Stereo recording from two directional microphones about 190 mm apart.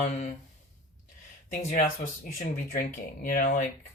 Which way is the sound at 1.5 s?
40° left (ahead or behind).